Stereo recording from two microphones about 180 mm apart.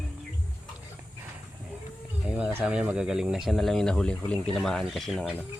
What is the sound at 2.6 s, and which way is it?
Speech, 5° right (ahead or behind).